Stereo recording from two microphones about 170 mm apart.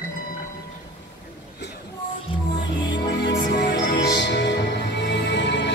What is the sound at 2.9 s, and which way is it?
Music, 90° left.